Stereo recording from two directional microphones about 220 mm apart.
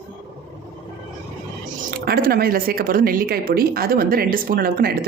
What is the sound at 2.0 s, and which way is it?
A woman's voice, 45° right (ahead or behind).